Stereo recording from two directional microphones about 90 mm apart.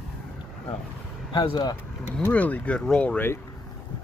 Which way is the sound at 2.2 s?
15° left (ahead or behind).